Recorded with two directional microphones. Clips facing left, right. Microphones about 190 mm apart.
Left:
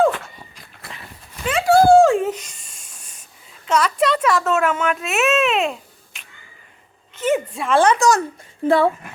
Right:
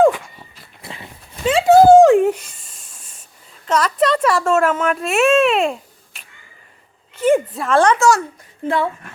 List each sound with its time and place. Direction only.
0.0 s dog: 10° right (ahead or behind)
0.8 s a sound: 30° right (ahead or behind); by 2.6 s 10° right (ahead or behind)
3.7 s a sound: 5° left (ahead or behind)
4.4 s a child's voice: 5° left (ahead or behind)
7.3 s a child's voice: centre (ahead or behind)
7.9 s speech: 15° left (ahead or behind)
8.6 s speech: 35° left (ahead or behind)